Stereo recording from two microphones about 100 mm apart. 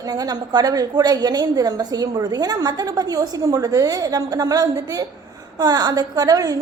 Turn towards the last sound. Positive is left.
turn(degrees=-40)  # may be behind; listen again after turning